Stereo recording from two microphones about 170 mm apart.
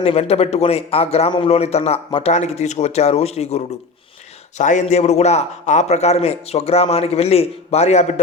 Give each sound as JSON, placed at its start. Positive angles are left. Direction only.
{"t": 0.0, "sound": "a man's voice", "side_deg": 35}